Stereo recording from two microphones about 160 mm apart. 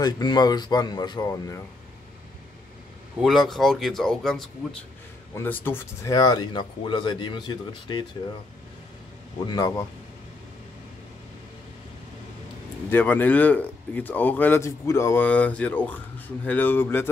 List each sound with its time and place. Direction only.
0.0 s speech: 25° left (ahead or behind)
3.2 s speech: centre (ahead or behind)
5.3 s speech: 15° left (ahead or behind)
6.1 s speech: 25° left (ahead or behind)
9.5 s speech: 20° left (ahead or behind)
12.9 s speech: 10° left (ahead or behind)